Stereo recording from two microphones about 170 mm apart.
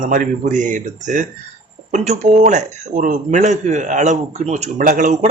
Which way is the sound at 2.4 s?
45° right (ahead or behind).